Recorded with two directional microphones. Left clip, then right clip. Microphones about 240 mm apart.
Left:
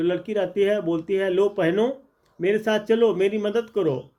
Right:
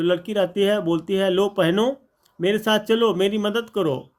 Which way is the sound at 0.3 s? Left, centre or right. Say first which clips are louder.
Even; right.